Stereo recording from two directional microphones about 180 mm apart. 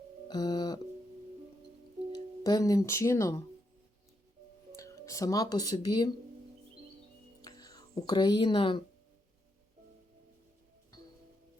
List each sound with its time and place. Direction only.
0.3 s telephone: 25° left (ahead or behind)
2.1 s speech: 20° left (ahead or behind)
4.8 s speech: 15° left (ahead or behind)
7.4 s a sound: 20° left (ahead or behind)